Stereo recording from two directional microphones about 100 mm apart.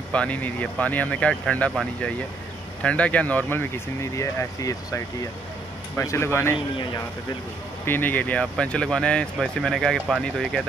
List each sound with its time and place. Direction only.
0.1 s speech: 15° left (ahead or behind)
2.8 s speech: 10° left (ahead or behind)
7.8 s speech: 20° left (ahead or behind); by 10.6 s 5° left (ahead or behind)